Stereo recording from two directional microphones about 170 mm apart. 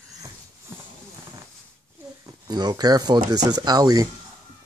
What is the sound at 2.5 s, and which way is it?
Speech, 25° right (ahead or behind).